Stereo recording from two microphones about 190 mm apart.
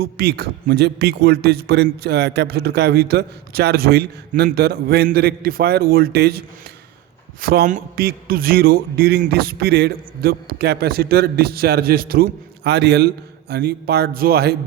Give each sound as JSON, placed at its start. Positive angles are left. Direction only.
{"t": 0.0, "sound": "a man's voice", "side_deg": -55}
{"t": 7.4, "sound": "a man's voice", "side_deg": -50}